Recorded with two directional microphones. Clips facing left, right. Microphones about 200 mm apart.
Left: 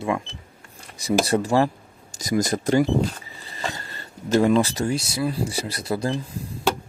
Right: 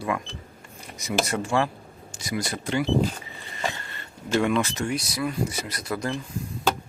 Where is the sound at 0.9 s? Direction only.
35° left (ahead or behind).